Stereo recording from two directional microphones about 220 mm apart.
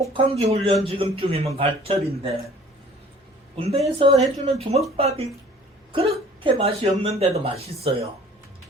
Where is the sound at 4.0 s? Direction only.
30° right (ahead or behind).